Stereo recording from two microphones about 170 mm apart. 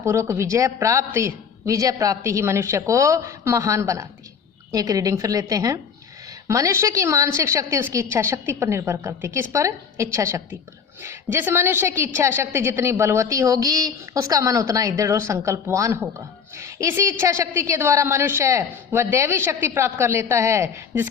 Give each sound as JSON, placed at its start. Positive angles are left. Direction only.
{"t": 0.0, "sound": "a woman's voice", "side_deg": -15}